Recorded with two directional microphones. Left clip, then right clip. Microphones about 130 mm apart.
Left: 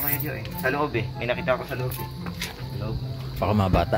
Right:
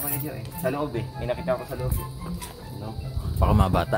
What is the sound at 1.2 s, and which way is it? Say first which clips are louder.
Speech: left 2 dB; 10° right (ahead or behind).